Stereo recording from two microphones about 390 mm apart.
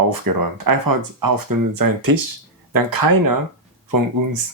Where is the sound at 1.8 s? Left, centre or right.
Right.